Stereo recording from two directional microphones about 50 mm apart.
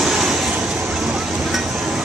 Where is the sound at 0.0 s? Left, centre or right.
Centre.